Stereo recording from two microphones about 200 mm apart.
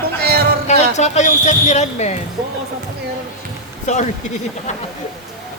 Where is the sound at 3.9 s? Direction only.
35° left (ahead or behind).